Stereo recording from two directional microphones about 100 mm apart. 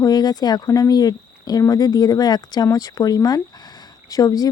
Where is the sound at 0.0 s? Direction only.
40° left (ahead or behind).